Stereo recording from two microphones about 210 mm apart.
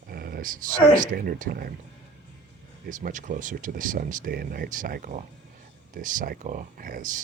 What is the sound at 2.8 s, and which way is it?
Speech, 40° right (ahead or behind).